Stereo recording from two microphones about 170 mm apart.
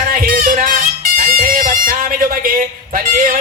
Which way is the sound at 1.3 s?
55° right (ahead or behind).